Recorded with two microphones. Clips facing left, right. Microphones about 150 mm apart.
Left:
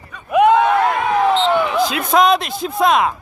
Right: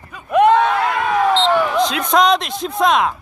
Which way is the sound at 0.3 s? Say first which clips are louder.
Even; 10° left (ahead or behind).